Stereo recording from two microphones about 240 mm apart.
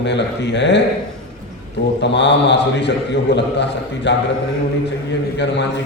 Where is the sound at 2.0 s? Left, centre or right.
Left.